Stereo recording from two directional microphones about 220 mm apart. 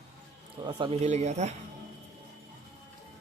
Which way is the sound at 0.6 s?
20° right (ahead or behind).